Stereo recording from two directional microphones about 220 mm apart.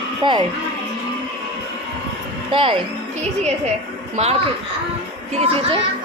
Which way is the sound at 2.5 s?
25° right (ahead or behind).